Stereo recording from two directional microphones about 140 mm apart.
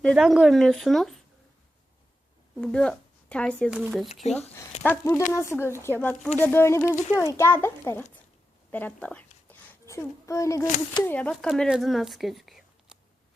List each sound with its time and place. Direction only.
0.2 s speech: 5° right (ahead or behind)
2.6 s speech: 5° left (ahead or behind)
3.7 s speech: 5° right (ahead or behind)
4.1 s speech: 50° left (ahead or behind)
4.8 s a child's voice: 15° left (ahead or behind)
9.5 s a sound: 20° left (ahead or behind)
11.0 s speech: 10° left (ahead or behind)